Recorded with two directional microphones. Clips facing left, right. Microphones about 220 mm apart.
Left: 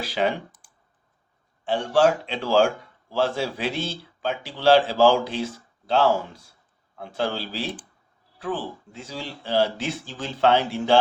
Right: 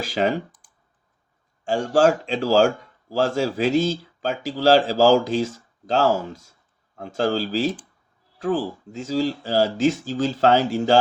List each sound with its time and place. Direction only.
0.0 s speech: 45° right (ahead or behind)
1.6 s speech: 45° right (ahead or behind)